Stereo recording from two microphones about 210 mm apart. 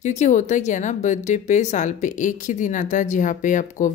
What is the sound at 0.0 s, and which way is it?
Speech, 35° left (ahead or behind).